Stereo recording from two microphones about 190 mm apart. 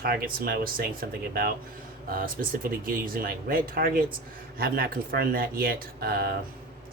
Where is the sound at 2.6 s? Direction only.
50° right (ahead or behind).